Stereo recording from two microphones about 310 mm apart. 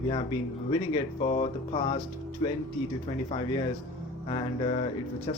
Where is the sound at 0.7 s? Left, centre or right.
Centre.